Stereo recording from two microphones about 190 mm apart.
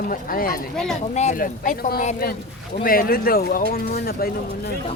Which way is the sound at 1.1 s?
35° left (ahead or behind).